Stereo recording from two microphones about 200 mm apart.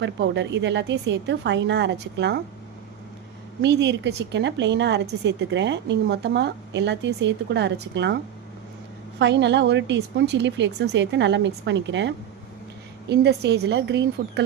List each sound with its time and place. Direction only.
0.0 s a woman's voice: 60° right (ahead or behind)
3.6 s a woman's voice: 60° right (ahead or behind)